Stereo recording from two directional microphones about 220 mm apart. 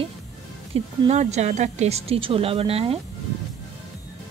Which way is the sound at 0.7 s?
30° right (ahead or behind).